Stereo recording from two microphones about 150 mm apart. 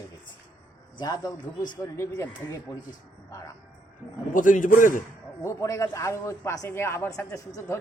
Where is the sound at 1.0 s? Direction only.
25° left (ahead or behind).